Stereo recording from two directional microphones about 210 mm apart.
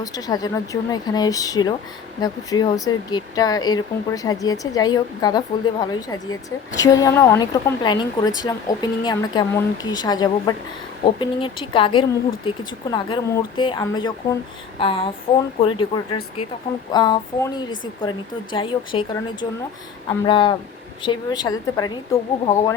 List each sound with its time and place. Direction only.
0.0 s a woman's voice: 15° left (ahead or behind)